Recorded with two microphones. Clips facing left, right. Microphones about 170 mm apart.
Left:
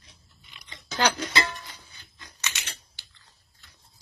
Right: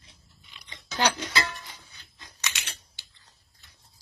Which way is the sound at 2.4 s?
15° right (ahead or behind).